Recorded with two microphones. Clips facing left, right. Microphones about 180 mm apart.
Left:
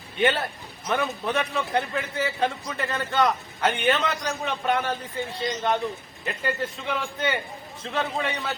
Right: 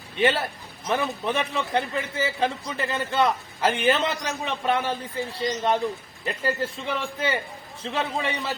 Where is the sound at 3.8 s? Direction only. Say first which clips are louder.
Right 1 dB; 30° right (ahead or behind).